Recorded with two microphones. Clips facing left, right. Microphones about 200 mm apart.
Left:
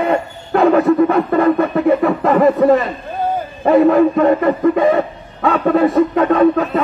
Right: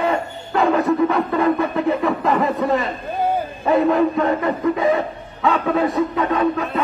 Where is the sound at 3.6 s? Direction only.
60° left (ahead or behind).